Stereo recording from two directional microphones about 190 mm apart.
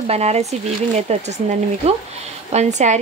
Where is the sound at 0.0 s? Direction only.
35° right (ahead or behind).